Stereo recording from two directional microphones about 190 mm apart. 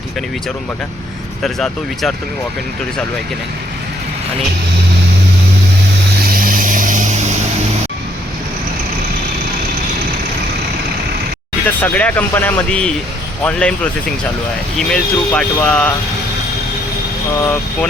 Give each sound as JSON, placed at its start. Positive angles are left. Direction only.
{"t": 1.4, "sound": "speech", "side_deg": 0}
{"t": 6.2, "sound": "vehicle", "side_deg": -50}
{"t": 11.6, "sound": "speech", "side_deg": 10}
{"t": 17.4, "sound": "speech", "side_deg": 15}